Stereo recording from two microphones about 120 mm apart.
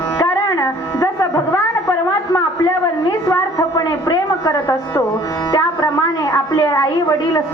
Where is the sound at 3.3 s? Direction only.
30° left (ahead or behind).